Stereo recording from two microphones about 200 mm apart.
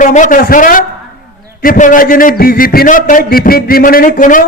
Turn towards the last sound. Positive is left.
turn(degrees=40)  # may be behind; listen again after turning